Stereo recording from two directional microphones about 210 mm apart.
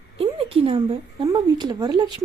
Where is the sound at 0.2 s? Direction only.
25° right (ahead or behind).